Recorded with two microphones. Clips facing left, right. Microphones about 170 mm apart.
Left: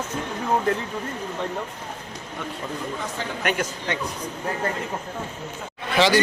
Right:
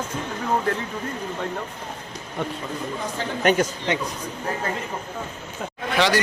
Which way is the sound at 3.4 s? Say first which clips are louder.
Right 7 dB; 30° right (ahead or behind).